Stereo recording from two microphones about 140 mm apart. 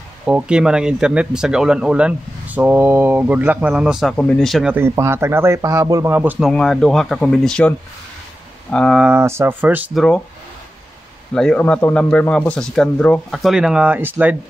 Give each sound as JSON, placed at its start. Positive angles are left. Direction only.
{"t": 0.2, "sound": "speech", "side_deg": -5}
{"t": 4.7, "sound": "speech", "side_deg": -20}
{"t": 6.5, "sound": "speech", "side_deg": 0}
{"t": 8.7, "sound": "speech", "side_deg": 5}
{"t": 9.0, "sound": "speech", "side_deg": -15}
{"t": 9.9, "sound": "speech", "side_deg": 5}
{"t": 11.3, "sound": "speech", "side_deg": 10}